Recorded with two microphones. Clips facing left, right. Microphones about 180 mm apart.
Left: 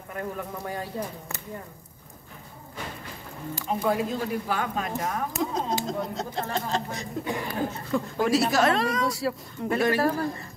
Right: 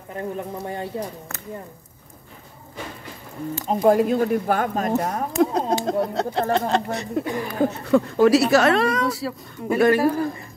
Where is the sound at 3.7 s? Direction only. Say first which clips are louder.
Right 9 dB; 40° right (ahead or behind).